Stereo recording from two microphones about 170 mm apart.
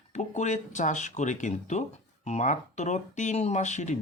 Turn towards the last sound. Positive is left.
turn(degrees=45)  # may be behind; listen again after turning